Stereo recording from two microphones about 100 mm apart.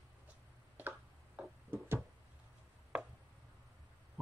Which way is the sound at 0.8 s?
20° right (ahead or behind).